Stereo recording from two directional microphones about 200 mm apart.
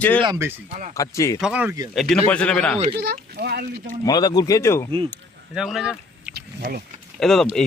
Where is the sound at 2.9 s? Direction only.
55° right (ahead or behind).